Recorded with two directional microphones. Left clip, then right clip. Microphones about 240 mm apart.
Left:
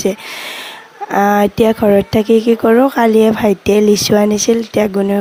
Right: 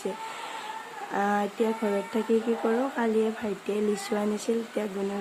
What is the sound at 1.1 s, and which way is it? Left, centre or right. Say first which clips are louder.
Speech: left 15 dB; left.